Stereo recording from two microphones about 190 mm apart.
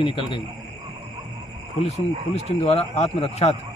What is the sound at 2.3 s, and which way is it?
Speech, 35° left (ahead or behind).